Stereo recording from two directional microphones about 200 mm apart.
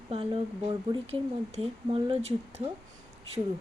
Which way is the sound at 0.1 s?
25° right (ahead or behind).